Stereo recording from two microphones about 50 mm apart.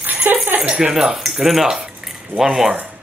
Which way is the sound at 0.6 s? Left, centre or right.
Centre.